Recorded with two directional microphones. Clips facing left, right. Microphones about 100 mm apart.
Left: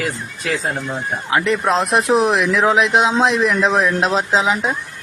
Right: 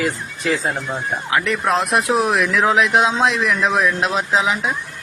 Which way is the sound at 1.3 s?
25° left (ahead or behind).